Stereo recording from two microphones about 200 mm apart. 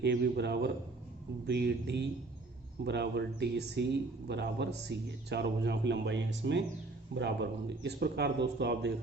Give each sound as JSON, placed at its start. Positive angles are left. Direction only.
{"t": 0.0, "sound": "a man's voice", "side_deg": -60}